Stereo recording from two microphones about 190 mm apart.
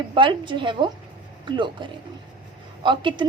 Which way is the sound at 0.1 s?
25° right (ahead or behind).